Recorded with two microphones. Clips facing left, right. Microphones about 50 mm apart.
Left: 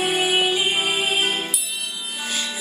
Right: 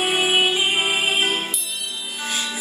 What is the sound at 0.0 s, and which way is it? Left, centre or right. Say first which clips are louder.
Music: right 1 dB; right.